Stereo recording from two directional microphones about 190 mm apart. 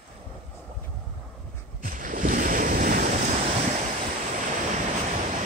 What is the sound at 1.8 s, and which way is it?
Waves, 45° right (ahead or behind).